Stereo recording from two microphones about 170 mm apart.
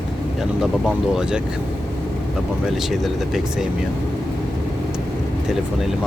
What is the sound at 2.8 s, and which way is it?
Speech, centre (ahead or behind).